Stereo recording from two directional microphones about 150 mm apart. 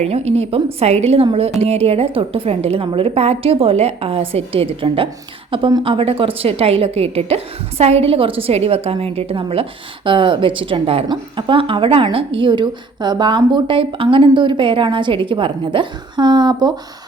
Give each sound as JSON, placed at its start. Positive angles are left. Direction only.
{"t": 0.0, "sound": "a woman's voice", "side_deg": -45}